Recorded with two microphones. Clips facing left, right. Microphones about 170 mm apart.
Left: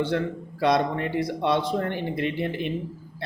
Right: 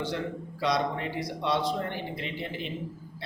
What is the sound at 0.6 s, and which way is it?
Speech, 55° left (ahead or behind).